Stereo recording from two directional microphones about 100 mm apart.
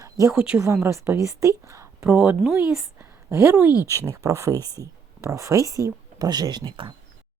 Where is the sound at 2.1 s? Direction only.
10° right (ahead or behind).